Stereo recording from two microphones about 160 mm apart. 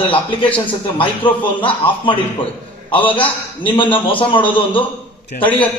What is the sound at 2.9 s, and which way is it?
Speech, 10° left (ahead or behind).